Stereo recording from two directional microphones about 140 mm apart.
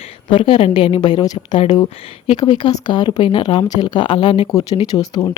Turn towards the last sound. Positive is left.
turn(degrees=25)  # may be behind; listen again after turning